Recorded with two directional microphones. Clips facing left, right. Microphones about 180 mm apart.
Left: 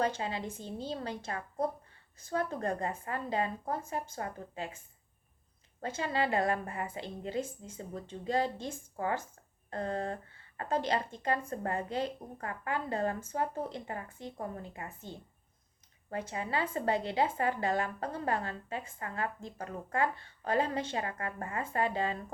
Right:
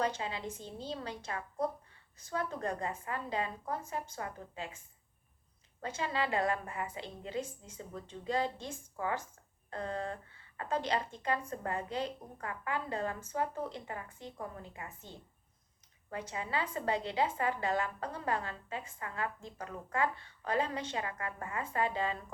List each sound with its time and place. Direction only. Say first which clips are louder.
0.0 s a woman's voice: left 2 dB; 40° left (ahead or behind)
5.8 s a woman's voice: left 3 dB; 40° left (ahead or behind)
16.0 s a woman's voice: left 3 dB; 40° left (ahead or behind)